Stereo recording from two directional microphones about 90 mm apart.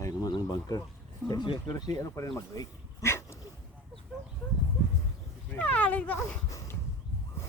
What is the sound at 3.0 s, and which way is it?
Dog, 30° left (ahead or behind).